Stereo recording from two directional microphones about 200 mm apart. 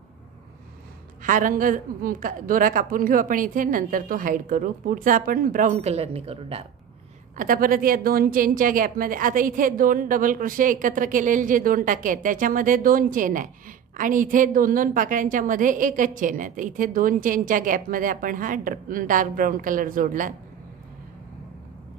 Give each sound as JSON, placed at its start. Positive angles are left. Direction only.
{"t": 1.2, "sound": "a woman's voice", "side_deg": -40}
{"t": 7.3, "sound": "a woman's voice", "side_deg": -45}